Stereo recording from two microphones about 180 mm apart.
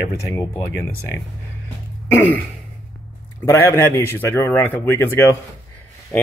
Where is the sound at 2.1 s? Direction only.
10° left (ahead or behind).